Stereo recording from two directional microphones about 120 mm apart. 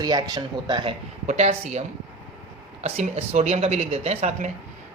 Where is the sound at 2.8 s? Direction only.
65° right (ahead or behind).